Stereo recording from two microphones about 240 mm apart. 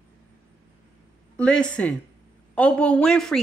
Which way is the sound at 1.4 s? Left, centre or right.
Centre.